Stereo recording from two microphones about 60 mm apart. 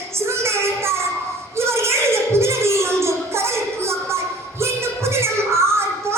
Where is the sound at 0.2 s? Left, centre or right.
Right.